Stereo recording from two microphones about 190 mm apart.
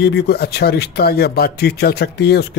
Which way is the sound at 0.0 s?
60° left (ahead or behind).